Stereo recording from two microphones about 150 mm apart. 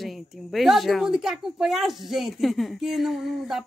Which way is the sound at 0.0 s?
Centre (ahead or behind).